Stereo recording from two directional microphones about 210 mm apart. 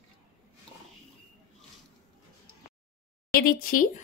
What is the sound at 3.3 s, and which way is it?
Speech, 45° left (ahead or behind).